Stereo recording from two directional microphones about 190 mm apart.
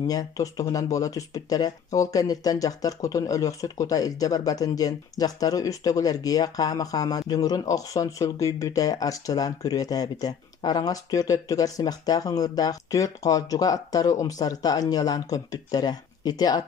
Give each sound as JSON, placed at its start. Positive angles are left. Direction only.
{"t": 0.0, "sound": "speech", "side_deg": 20}